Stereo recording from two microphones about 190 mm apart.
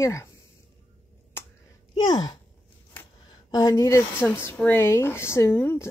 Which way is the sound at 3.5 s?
20° left (ahead or behind).